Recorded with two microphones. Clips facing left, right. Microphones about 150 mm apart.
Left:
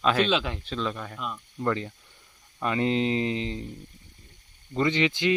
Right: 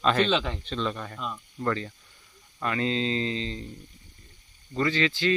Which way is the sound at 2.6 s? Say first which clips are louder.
Left 3 dB; 20° left (ahead or behind).